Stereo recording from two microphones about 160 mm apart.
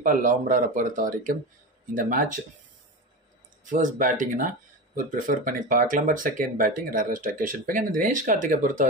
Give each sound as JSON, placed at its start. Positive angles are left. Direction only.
{"t": 0.0, "sound": "speech", "side_deg": -60}
{"t": 3.6, "sound": "speech", "side_deg": -55}